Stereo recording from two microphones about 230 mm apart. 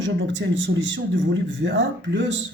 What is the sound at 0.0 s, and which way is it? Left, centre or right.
A man's voice, right.